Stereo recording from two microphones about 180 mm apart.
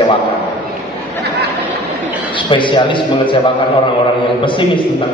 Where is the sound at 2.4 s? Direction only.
25° left (ahead or behind).